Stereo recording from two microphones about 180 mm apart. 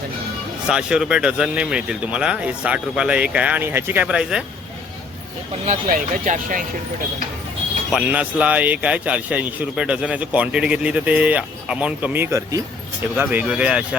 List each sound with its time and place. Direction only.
0.7 s speech: 5° right (ahead or behind)
5.6 s speech: 45° right (ahead or behind)
7.9 s speech: 10° right (ahead or behind)